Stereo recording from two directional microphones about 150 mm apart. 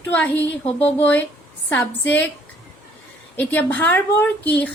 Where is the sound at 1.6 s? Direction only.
10° left (ahead or behind).